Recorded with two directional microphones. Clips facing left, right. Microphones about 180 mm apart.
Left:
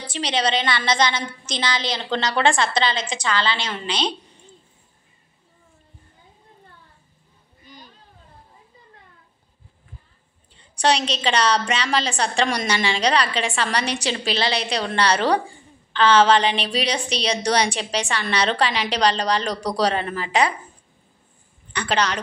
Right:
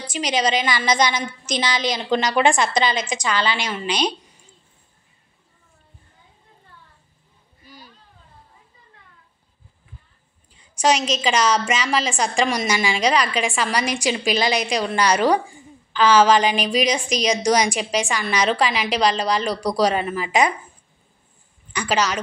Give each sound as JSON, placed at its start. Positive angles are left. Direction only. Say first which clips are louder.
{"t": 0.0, "sound": "a woman's voice", "louder": "right 2 dB", "side_deg": 30}
{"t": 0.9, "sound": "a woman's voice", "louder": "right 1 dB", "side_deg": -15}
{"t": 7.6, "sound": "a sound", "louder": "even", "side_deg": -5}
{"t": 10.8, "sound": "a woman's voice", "louder": "right 1 dB", "side_deg": -10}
{"t": 21.7, "sound": "a woman's voice", "louder": "right 1 dB", "side_deg": -10}